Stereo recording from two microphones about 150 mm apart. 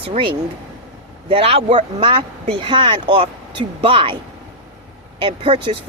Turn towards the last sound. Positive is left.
turn(degrees=-35)  # may be behind; listen again after turning